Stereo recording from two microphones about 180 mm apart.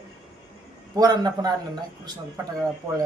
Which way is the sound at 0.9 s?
20° right (ahead or behind).